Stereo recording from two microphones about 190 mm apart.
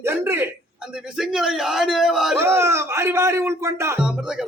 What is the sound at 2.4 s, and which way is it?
Speech, 15° right (ahead or behind).